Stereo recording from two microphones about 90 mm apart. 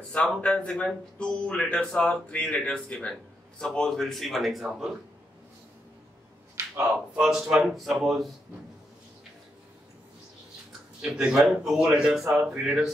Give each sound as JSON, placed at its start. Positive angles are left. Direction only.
{"t": 0.4, "sound": "speech", "side_deg": 10}
{"t": 6.6, "sound": "a sound", "side_deg": -35}
{"t": 7.2, "sound": "speech", "side_deg": -5}
{"t": 11.0, "sound": "speech", "side_deg": -10}